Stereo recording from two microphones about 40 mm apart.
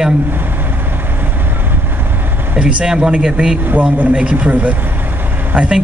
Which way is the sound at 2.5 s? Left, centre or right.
Right.